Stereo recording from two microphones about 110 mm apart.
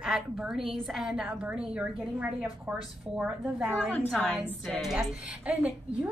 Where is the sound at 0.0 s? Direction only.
5° right (ahead or behind).